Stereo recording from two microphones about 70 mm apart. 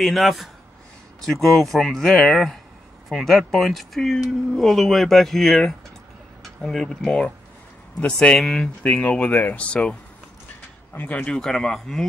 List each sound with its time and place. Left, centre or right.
0.0 s speech: centre
8.8 s speech: centre
11.0 s speech: left
11.3 s speech: centre